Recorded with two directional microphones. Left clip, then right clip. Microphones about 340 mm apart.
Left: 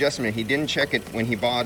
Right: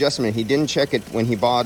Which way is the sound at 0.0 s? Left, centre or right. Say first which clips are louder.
Right 3 dB; centre.